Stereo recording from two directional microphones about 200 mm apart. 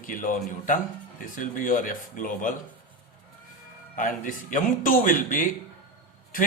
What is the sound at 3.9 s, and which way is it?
A man's voice, 40° left (ahead or behind).